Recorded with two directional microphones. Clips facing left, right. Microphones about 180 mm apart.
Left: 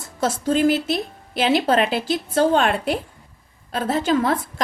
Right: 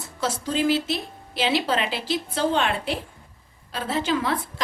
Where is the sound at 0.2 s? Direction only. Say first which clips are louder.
Left 6 dB; 50° left (ahead or behind).